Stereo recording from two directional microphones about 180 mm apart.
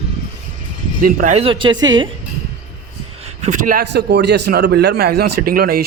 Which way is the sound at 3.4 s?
45° right (ahead or behind).